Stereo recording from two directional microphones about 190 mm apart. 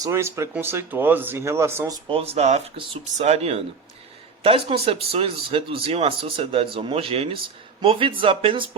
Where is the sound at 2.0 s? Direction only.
30° right (ahead or behind).